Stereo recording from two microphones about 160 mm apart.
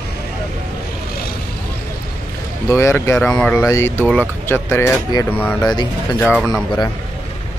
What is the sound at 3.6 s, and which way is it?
Speech, 15° left (ahead or behind).